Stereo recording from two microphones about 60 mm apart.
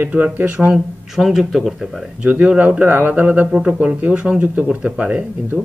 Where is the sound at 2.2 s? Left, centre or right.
Right.